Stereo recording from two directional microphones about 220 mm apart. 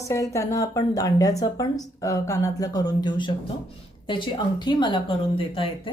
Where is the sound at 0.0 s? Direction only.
15° left (ahead or behind).